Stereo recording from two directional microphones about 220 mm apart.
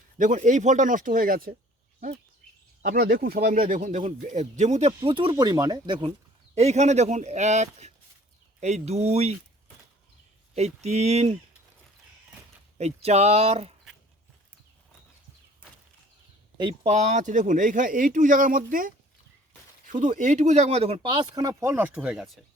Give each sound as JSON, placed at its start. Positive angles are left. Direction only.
{"t": 0.2, "sound": "speech", "side_deg": -35}
{"t": 2.8, "sound": "speech", "side_deg": -45}
{"t": 6.5, "sound": "speech", "side_deg": -30}
{"t": 10.5, "sound": "speech", "side_deg": -30}
{"t": 12.7, "sound": "speech", "side_deg": -30}
{"t": 16.6, "sound": "speech", "side_deg": -25}